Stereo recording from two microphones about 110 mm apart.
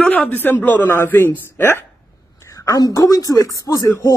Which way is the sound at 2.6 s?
30° left (ahead or behind).